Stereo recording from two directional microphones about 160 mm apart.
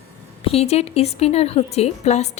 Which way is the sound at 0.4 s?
40° left (ahead or behind).